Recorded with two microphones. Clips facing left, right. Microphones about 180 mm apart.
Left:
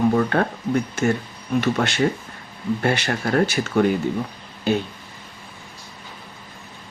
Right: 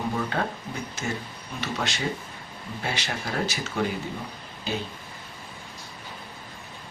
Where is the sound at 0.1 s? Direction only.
60° left (ahead or behind).